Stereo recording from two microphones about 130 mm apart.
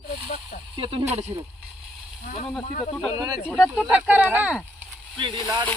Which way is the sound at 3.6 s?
5° right (ahead or behind).